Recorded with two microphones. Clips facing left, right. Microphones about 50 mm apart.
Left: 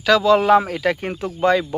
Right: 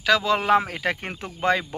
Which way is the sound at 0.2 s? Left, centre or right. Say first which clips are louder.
Left 6 dB; right.